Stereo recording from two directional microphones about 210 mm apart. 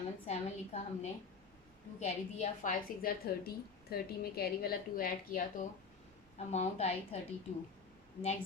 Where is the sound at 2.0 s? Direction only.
35° left (ahead or behind).